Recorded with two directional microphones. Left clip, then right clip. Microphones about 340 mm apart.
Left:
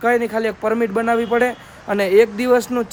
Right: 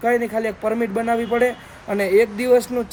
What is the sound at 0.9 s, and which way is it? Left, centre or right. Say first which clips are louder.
A man's voice: left 3 dB; left.